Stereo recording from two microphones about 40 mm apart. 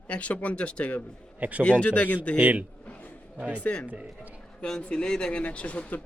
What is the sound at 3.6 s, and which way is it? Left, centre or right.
Speech, left.